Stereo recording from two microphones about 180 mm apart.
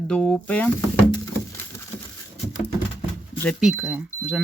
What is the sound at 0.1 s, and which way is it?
Speech, 5° left (ahead or behind).